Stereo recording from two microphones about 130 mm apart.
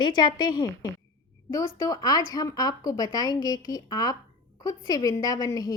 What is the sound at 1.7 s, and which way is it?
Speech, 30° left (ahead or behind).